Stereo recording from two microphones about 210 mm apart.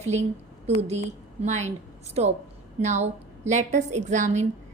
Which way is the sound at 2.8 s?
35° right (ahead or behind).